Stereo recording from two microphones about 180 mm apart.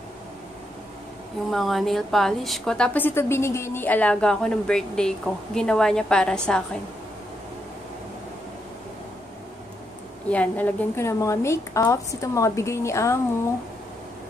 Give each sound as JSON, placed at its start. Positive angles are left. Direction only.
{"t": 1.5, "sound": "a woman's voice", "side_deg": 0}
{"t": 10.3, "sound": "a woman's voice", "side_deg": 10}